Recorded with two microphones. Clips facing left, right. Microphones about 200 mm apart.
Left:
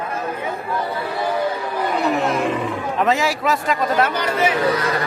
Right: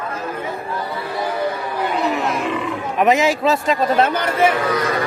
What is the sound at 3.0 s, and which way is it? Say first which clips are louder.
A man's voice: right 4 dB; 20° right (ahead or behind).